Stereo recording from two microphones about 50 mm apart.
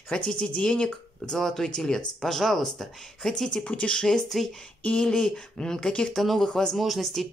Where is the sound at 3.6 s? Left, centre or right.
Left.